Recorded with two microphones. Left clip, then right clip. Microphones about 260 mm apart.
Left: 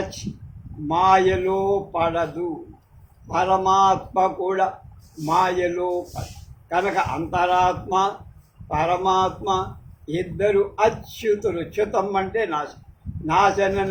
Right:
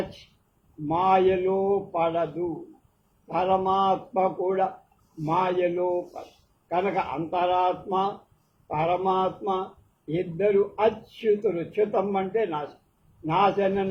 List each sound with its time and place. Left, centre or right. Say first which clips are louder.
0.9 s speech: left 4 dB; left
3.3 s speech: left 5 dB; left